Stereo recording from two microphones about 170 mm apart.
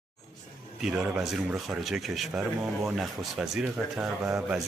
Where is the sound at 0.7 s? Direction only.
5° right (ahead or behind).